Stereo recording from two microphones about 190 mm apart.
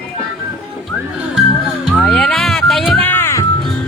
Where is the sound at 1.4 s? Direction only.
Centre (ahead or behind).